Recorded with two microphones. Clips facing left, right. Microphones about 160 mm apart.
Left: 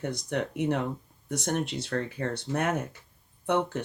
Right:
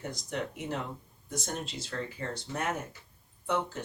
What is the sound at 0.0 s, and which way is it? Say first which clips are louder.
Speech: left 5 dB; 65° left (ahead or behind).